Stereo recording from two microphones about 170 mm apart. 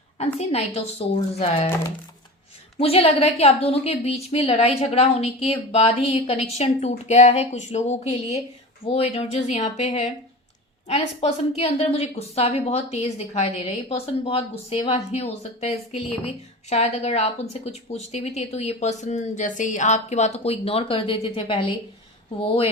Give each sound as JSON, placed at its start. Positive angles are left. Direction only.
{"t": 0.3, "sound": "a woman's voice", "side_deg": 35}
{"t": 2.7, "sound": "a woman's voice", "side_deg": 35}